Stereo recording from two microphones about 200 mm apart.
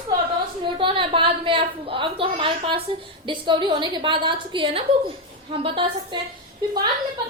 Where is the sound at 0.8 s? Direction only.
25° right (ahead or behind).